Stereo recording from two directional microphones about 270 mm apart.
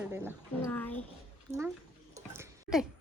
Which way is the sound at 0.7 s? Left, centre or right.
Centre.